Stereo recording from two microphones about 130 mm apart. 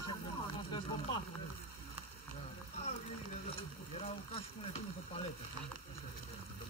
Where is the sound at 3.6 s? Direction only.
50° left (ahead or behind).